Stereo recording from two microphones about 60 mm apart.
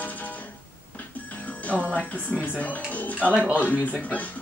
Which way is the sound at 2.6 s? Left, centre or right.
Left.